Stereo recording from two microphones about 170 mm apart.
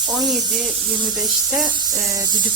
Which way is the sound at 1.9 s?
15° right (ahead or behind).